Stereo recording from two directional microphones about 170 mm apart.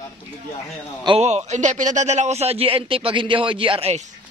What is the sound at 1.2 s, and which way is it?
A man's voice, 40° right (ahead or behind).